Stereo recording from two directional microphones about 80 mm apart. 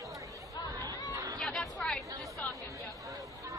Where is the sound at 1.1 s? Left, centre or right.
Right.